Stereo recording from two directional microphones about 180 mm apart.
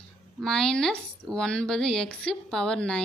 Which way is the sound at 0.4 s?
5° left (ahead or behind).